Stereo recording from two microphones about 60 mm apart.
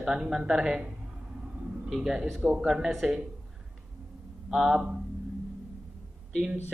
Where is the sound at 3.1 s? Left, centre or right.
Centre.